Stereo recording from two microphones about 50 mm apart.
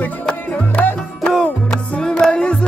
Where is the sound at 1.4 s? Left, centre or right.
Centre.